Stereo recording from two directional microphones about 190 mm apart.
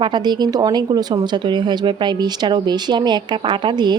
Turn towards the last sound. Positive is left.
turn(degrees=-20)  # may be behind; listen again after turning